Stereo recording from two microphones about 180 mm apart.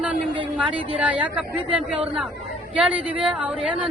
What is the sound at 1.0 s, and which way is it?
Speech, 5° right (ahead or behind).